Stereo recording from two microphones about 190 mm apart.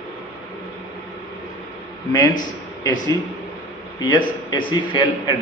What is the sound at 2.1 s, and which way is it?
A man's voice, 20° left (ahead or behind).